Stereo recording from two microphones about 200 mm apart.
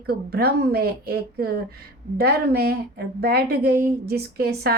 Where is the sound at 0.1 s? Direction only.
50° right (ahead or behind).